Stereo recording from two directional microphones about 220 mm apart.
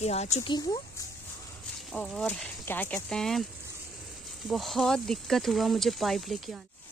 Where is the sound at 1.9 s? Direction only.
5° left (ahead or behind).